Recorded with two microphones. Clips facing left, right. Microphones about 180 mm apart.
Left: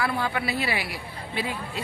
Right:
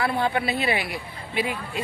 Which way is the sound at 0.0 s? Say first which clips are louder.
Right 3 dB; 25° right (ahead or behind).